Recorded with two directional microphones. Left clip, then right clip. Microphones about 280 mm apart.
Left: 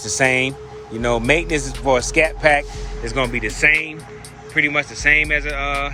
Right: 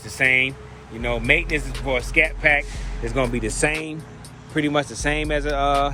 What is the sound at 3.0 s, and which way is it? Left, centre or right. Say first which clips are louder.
Speech: left 2 dB; centre.